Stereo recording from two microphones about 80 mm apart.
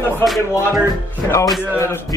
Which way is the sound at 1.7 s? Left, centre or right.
Left.